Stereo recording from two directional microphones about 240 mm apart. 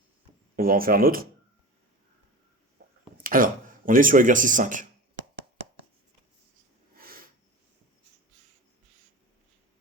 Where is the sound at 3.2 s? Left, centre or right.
Right.